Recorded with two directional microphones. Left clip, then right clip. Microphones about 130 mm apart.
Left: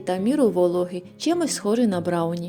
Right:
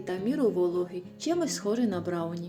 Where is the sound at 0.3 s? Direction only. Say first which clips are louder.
Left 7 dB; 90° left.